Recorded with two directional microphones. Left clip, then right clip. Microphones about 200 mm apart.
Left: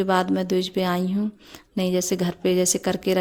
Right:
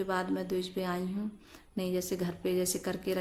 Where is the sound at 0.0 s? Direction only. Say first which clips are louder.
Left 11 dB; 45° left (ahead or behind).